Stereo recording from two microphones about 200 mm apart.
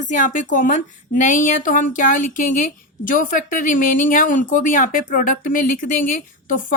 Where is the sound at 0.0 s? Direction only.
40° left (ahead or behind).